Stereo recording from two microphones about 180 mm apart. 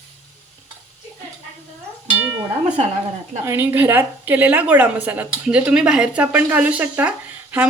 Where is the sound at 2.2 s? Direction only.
20° right (ahead or behind).